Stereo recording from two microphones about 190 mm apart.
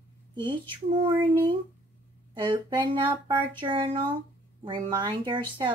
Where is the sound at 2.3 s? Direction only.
25° right (ahead or behind).